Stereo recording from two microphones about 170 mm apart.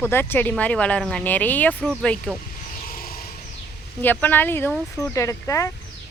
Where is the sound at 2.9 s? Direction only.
55° left (ahead or behind).